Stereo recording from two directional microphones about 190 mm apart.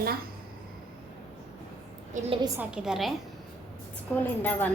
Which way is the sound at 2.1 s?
40° right (ahead or behind).